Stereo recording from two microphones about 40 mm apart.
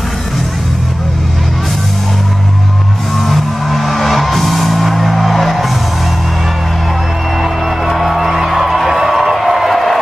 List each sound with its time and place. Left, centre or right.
3.2 s music: centre
7.4 s music: centre